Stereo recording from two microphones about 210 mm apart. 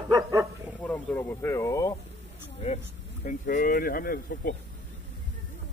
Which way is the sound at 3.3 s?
40° left (ahead or behind).